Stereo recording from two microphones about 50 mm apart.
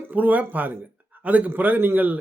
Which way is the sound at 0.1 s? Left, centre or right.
Right.